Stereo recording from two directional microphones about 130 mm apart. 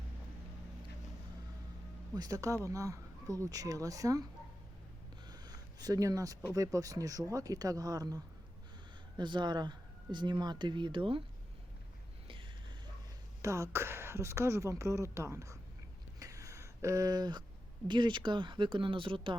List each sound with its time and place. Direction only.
2.1 s speech: 25° right (ahead or behind)
5.3 s a sound: 30° right (ahead or behind)
6.5 s speech: 25° right (ahead or behind)
13.4 s speech: 20° right (ahead or behind)
16.2 s a sound: 25° right (ahead or behind)
17.8 s speech: 35° right (ahead or behind)